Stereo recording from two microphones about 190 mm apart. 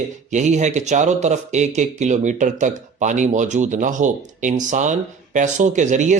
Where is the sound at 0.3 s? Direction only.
40° right (ahead or behind).